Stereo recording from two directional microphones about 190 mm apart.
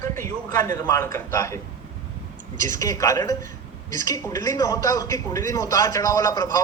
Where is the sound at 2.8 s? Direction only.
15° left (ahead or behind).